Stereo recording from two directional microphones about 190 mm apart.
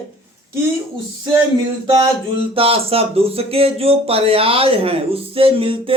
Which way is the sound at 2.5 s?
30° right (ahead or behind).